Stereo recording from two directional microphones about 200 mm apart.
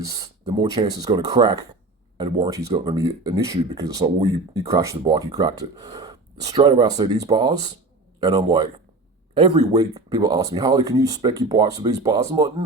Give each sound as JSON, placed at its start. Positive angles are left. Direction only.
{"t": 0.0, "sound": "speech", "side_deg": -15}
{"t": 6.4, "sound": "speech", "side_deg": -30}